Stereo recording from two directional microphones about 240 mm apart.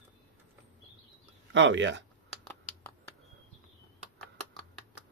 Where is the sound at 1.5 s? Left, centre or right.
Right.